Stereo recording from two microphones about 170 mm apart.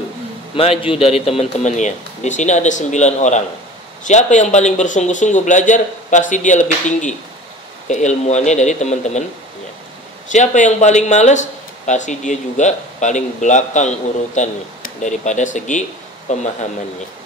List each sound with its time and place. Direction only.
0.6 s speech: 35° left (ahead or behind)
10.3 s speech: 45° left (ahead or behind)